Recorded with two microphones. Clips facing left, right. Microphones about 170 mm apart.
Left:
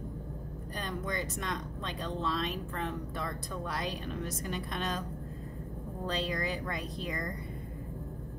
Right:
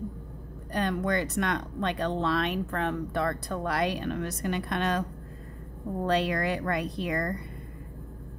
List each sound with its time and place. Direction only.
0.7 s speech: 65° right (ahead or behind)
6.0 s speech: 65° right (ahead or behind)